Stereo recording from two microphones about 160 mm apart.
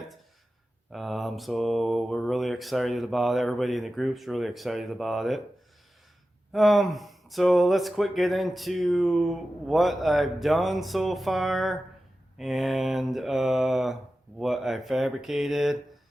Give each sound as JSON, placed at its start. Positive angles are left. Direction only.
{"t": 0.9, "sound": "speech", "side_deg": 0}
{"t": 6.5, "sound": "speech", "side_deg": 0}